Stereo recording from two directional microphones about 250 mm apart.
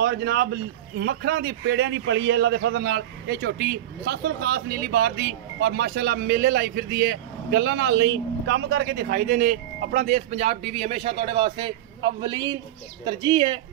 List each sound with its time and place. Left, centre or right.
0.0 s a man's voice: right; by 13.5 s centre